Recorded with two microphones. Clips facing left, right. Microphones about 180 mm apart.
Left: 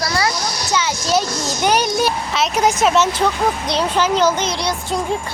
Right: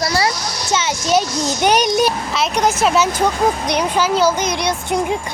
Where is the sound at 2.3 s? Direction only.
Centre (ahead or behind).